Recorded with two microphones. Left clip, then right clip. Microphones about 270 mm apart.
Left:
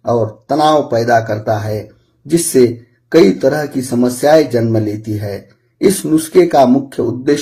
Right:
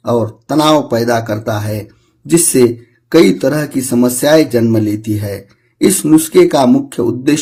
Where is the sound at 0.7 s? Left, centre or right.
Right.